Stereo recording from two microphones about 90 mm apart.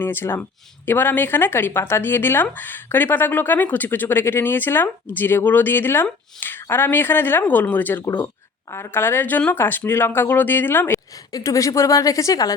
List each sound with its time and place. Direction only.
0.0 s speech: 25° left (ahead or behind)
10.9 s a woman's voice: 40° left (ahead or behind)